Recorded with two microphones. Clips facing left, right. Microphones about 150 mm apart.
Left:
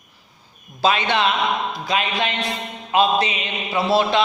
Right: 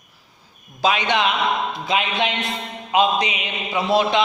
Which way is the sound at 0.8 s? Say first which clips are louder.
Left 1 dB; 15° right (ahead or behind).